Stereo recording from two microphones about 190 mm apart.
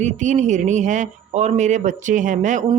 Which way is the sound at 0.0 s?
40° right (ahead or behind).